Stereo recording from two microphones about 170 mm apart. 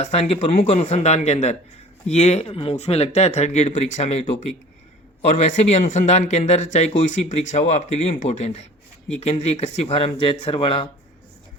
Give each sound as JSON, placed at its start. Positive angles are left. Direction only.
{"t": 0.0, "sound": "speech", "side_deg": 40}